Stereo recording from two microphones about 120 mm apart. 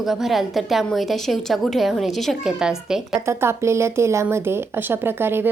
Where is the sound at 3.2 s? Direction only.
20° right (ahead or behind).